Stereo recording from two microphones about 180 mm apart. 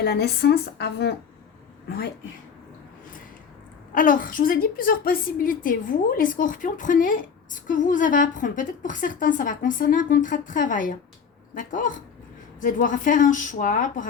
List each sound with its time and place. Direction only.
0.0 s speech: 65° left (ahead or behind)
3.9 s a woman's voice: 50° left (ahead or behind)